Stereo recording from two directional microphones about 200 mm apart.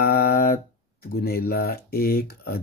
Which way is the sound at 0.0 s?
50° left (ahead or behind).